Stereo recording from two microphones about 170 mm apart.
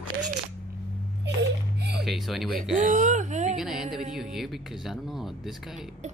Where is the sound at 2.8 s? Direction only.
50° right (ahead or behind).